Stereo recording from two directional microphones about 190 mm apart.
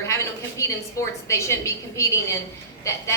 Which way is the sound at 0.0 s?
15° left (ahead or behind).